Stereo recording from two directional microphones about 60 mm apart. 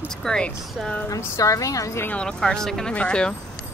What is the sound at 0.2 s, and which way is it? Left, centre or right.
Speech, centre.